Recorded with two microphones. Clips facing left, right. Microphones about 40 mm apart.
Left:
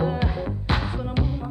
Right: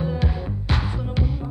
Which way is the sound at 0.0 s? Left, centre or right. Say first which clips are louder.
Left 2 dB; centre.